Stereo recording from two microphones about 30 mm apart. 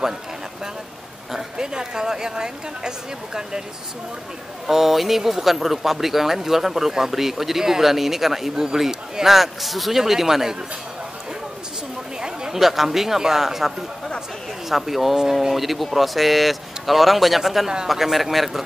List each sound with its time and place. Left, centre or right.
1.3 s a woman's voice: right
4.6 s speech: centre
12.5 s speech: centre